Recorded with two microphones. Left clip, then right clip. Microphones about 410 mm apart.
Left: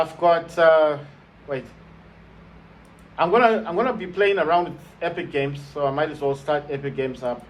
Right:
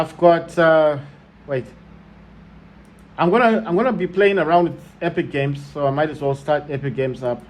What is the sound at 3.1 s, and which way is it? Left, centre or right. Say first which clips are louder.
A man's voice: right 2 dB; centre.